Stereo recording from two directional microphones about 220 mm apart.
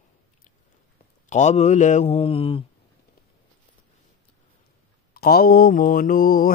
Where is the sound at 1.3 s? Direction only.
30° left (ahead or behind).